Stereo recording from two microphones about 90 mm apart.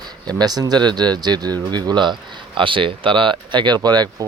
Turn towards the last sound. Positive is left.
turn(degrees=-50)  # may be behind; listen again after turning